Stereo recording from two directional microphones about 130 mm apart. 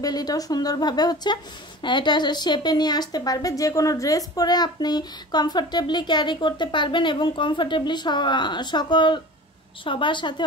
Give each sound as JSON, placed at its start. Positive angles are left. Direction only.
{"t": 0.0, "sound": "speech", "side_deg": 30}